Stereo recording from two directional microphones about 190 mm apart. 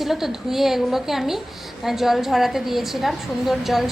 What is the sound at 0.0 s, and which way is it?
A woman's voice, centre (ahead or behind).